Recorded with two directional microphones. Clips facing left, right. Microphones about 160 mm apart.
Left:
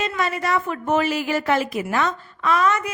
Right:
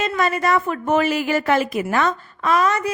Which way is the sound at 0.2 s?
45° right (ahead or behind).